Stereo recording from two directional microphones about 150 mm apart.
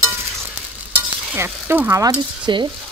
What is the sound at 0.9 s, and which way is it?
Stir, 15° right (ahead or behind).